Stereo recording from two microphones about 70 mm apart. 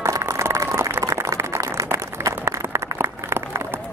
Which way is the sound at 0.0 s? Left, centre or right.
Right.